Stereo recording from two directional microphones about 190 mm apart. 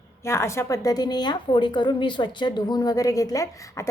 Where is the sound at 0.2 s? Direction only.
15° left (ahead or behind).